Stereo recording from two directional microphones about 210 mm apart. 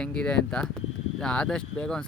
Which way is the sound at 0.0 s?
5° left (ahead or behind).